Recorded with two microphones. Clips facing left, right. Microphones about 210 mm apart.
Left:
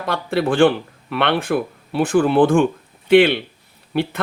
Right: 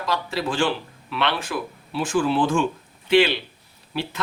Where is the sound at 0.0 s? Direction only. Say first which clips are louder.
Left 5 dB; 60° left (ahead or behind).